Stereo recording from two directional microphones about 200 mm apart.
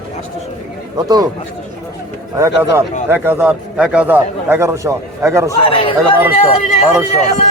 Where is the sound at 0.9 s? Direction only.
20° right (ahead or behind).